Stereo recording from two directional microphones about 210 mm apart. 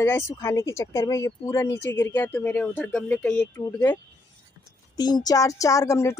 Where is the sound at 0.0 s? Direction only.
10° left (ahead or behind).